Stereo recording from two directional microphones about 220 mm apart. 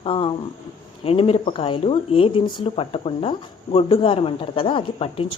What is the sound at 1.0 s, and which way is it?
Speech, 25° left (ahead or behind).